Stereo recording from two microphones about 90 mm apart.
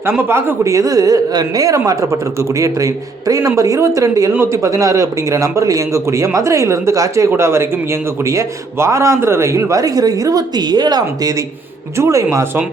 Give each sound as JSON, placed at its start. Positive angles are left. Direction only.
{"t": 0.0, "sound": "speech", "side_deg": -25}